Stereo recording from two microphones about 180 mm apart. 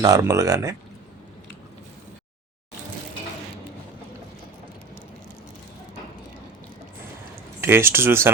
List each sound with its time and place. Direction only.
0.0 s speech: 20° right (ahead or behind)
7.6 s speech: 15° right (ahead or behind)